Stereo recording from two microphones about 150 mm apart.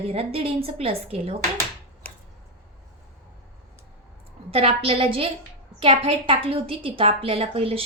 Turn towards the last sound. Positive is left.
turn(degrees=-40)  # may be behind; listen again after turning